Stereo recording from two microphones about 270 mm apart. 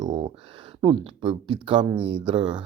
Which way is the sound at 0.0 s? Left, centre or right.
Centre.